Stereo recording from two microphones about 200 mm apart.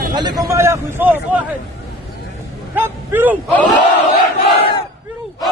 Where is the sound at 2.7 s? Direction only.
10° right (ahead or behind).